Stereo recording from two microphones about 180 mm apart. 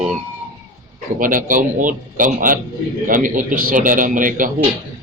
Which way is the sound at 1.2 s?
45° right (ahead or behind).